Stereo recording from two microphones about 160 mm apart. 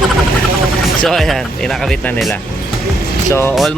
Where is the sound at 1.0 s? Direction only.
Centre (ahead or behind).